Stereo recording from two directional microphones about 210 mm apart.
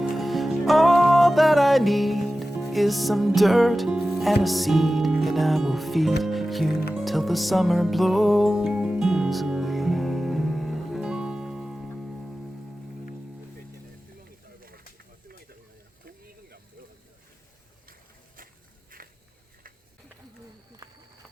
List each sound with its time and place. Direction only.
0.0 s music: centre (ahead or behind)
14.3 s snake: 45° right (ahead or behind)
18.9 s biting: 40° right (ahead or behind)